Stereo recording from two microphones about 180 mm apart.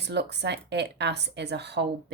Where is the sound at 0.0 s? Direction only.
70° right (ahead or behind).